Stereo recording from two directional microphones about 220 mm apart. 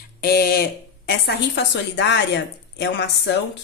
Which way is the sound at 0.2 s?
45° left (ahead or behind).